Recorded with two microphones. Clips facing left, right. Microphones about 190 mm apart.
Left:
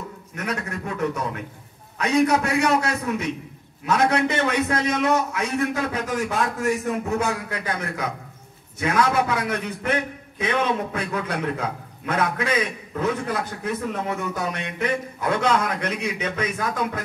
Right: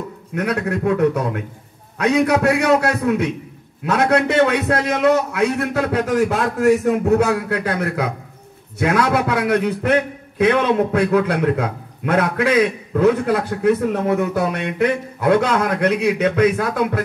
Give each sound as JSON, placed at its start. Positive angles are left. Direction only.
{"t": 0.3, "sound": "a man's voice", "side_deg": -60}